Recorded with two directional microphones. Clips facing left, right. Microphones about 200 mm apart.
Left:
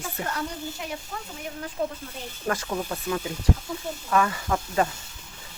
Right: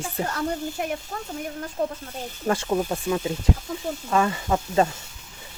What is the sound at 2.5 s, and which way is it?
Speech, 25° right (ahead or behind).